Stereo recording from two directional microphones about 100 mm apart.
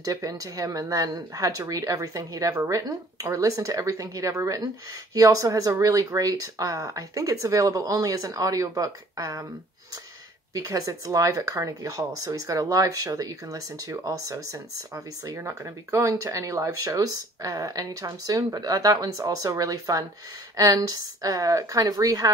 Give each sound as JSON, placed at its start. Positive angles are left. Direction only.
{"t": 0.0, "sound": "speech", "side_deg": -35}
{"t": 10.5, "sound": "speech", "side_deg": -35}